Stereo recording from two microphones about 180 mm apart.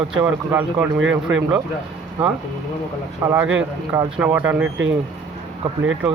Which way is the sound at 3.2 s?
15° right (ahead or behind).